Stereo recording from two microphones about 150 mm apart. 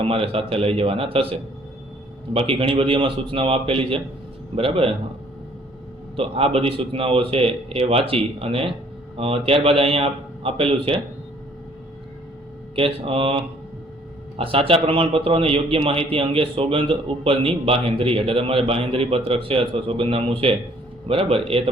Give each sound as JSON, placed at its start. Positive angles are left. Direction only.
{"t": 0.0, "sound": "a man's voice", "side_deg": -40}
{"t": 6.1, "sound": "a man's voice", "side_deg": -40}
{"t": 12.7, "sound": "a man's voice", "side_deg": -40}